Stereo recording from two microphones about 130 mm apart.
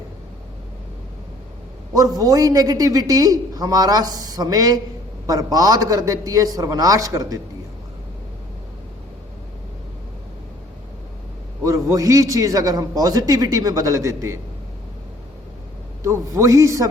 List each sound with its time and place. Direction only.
1.9 s a man's voice: 30° right (ahead or behind)
11.6 s a man's voice: 25° right (ahead or behind)
16.0 s a man's voice: 25° right (ahead or behind)